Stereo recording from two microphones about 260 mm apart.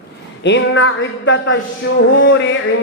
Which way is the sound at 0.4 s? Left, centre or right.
Left.